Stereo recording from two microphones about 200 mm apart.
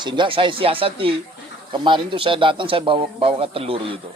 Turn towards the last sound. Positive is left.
turn(degrees=-30)  # may be behind; listen again after turning